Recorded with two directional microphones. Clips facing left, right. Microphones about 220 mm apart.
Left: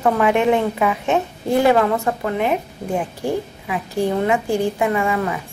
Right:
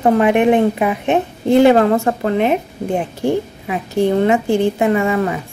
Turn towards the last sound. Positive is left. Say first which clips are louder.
# right 4 dB
turn(degrees=-25)  # may be behind; listen again after turning